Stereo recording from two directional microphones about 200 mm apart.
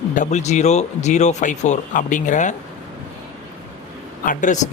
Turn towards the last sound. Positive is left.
turn(degrees=40)  # may be behind; listen again after turning